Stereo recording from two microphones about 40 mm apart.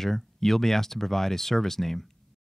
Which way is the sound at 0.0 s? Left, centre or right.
Centre.